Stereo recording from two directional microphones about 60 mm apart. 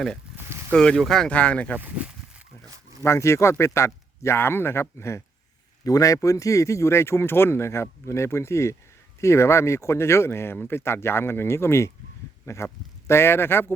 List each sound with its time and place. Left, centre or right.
0.7 s speech: centre
1.3 s speech: left
2.6 s zipper: right
3.0 s speech: left
5.8 s speech: left
6.2 s speech: left